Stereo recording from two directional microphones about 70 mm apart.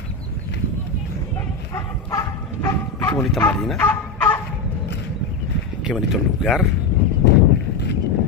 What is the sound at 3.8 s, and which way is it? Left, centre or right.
Fowl, left.